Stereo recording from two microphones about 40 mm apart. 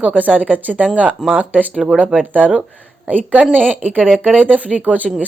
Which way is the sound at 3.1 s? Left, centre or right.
Right.